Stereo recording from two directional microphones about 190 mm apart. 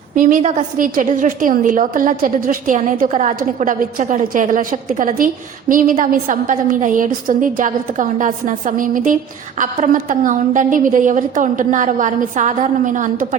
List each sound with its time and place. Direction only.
0.2 s a woman's voice: 40° right (ahead or behind)